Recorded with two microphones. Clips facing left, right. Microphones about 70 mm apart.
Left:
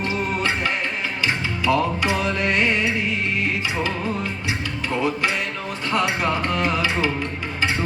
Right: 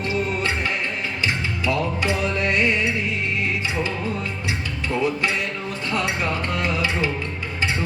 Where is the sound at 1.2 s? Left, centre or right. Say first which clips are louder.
Left 3 dB; left.